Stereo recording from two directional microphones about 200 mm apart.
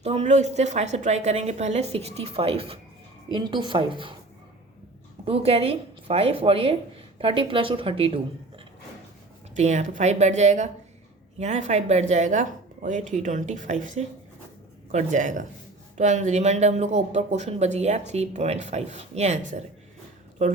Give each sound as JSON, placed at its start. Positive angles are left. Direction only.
{"t": 0.0, "sound": "speech", "side_deg": -30}
{"t": 5.2, "sound": "speech", "side_deg": -30}